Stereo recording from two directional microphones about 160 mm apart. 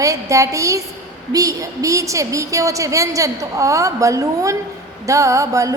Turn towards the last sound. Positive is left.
turn(degrees=-20)  # may be behind; listen again after turning